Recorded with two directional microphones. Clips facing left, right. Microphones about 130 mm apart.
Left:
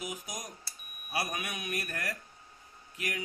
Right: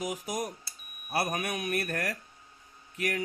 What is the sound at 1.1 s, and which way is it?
Speech, 50° right (ahead or behind).